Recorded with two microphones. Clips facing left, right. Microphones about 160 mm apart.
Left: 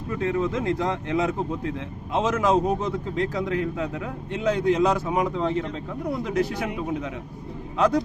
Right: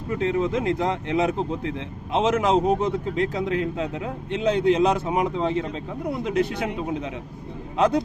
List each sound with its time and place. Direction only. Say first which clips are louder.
0.1 s a man's voice: right 2 dB; 20° right (ahead or behind)